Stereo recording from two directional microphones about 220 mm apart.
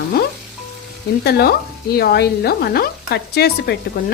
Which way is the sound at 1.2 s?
45° left (ahead or behind).